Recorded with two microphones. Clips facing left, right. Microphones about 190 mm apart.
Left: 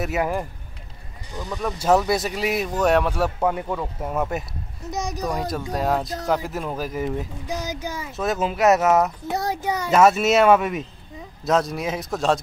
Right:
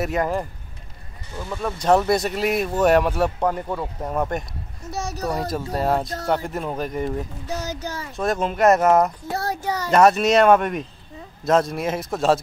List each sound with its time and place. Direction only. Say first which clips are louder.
0.0 s a child's voice: right 1 dB; 5° left (ahead or behind)
1.7 s speech: right 1 dB; 5° left (ahead or behind)
4.9 s a child's voice: even; 15° left (ahead or behind)
5.7 s speech: right 1 dB; centre (ahead or behind)
9.3 s a child's voice: left 1 dB; 20° left (ahead or behind)
9.8 s speech: right 1 dB; centre (ahead or behind)